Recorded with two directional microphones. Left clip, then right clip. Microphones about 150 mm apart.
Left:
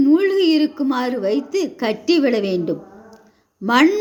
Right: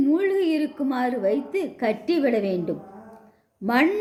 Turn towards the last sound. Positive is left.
turn(degrees=15)  # may be behind; listen again after turning